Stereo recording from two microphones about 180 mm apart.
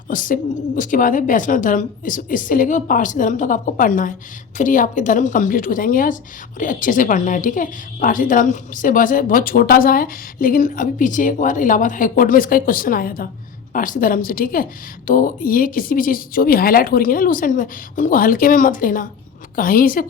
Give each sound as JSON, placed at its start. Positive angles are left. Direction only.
{"t": 0.1, "sound": "a woman's voice", "side_deg": 50}